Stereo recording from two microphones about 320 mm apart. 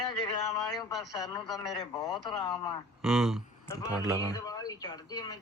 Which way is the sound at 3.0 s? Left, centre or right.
Centre.